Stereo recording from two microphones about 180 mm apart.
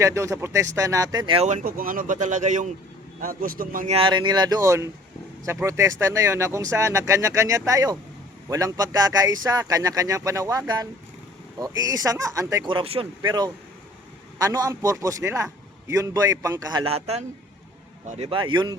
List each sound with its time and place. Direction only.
0.0 s speech: 15° right (ahead or behind)
1.5 s speech: 45° right (ahead or behind)
3.9 s speech: 30° right (ahead or behind)
16.8 s a man's voice: 35° right (ahead or behind)